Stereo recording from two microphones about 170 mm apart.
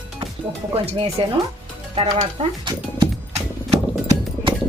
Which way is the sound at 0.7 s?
35° right (ahead or behind).